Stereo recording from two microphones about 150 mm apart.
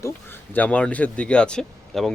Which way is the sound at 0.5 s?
10° left (ahead or behind).